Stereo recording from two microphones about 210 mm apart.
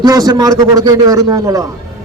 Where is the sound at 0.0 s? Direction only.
15° right (ahead or behind).